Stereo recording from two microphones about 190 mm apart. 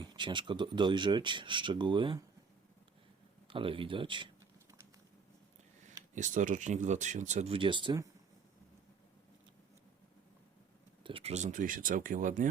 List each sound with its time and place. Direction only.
0.0 s speech: 25° right (ahead or behind)
3.5 s speech: 25° right (ahead or behind)
6.1 s speech: 40° right (ahead or behind); by 8.1 s 20° right (ahead or behind)
11.0 s speech: 30° right (ahead or behind)